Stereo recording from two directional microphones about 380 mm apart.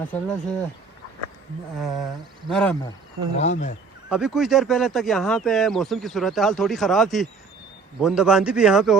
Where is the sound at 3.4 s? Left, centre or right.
Centre.